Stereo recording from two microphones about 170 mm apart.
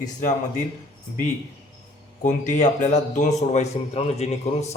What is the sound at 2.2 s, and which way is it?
A man's voice, 45° left (ahead or behind).